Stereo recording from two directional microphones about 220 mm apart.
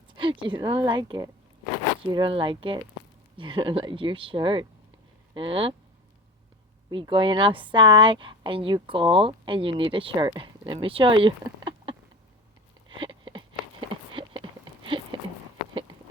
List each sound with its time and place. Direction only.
0.2 s a woman's voice: 20° right (ahead or behind)
6.9 s a woman's voice: 20° right (ahead or behind)
13.0 s a sound: 20° right (ahead or behind)